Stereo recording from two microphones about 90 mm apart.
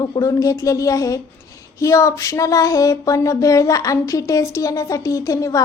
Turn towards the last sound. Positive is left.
turn(degrees=40)  # may be behind; listen again after turning